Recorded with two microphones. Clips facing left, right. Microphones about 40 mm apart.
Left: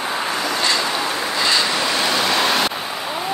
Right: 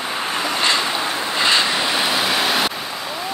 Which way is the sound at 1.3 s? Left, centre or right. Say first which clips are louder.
Right 2 dB; right.